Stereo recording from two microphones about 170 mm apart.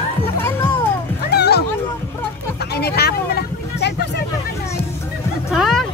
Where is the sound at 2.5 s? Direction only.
70° left (ahead or behind).